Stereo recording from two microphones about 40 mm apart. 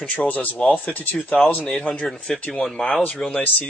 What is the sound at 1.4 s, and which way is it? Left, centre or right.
Speech, centre.